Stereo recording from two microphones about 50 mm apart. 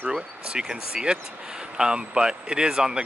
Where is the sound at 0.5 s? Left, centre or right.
Centre.